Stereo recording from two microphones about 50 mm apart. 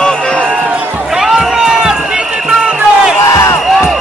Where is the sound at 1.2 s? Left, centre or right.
Centre.